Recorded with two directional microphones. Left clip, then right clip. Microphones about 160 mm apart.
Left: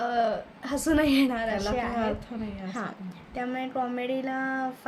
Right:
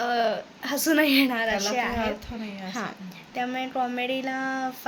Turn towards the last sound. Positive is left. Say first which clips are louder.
# right 1 dB
turn(degrees=0)  # may be behind; listen again after turning